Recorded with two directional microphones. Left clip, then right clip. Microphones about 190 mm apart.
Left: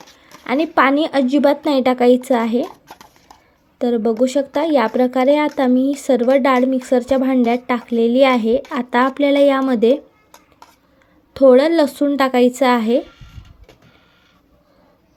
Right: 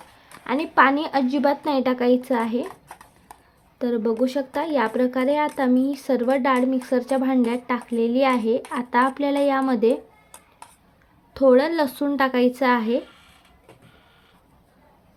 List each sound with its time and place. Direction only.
0.4 s speech: 20° left (ahead or behind)
3.8 s speech: 15° left (ahead or behind)
11.3 s speech: 20° left (ahead or behind)